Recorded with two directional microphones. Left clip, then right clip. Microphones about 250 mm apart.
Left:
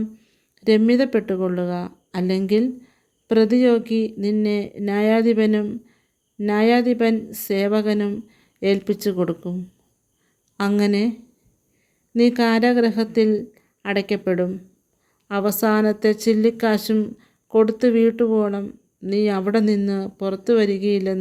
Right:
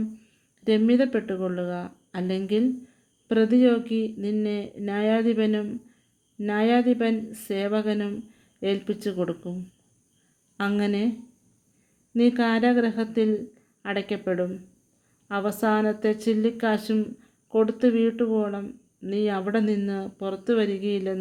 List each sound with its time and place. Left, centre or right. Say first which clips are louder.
0.6 s a woman's voice: left 5 dB; left
10.6 s a woman's voice: left 6 dB; left
12.1 s a woman's voice: left 5 dB; left